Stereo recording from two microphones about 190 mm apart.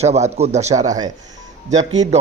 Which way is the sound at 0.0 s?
35° right (ahead or behind).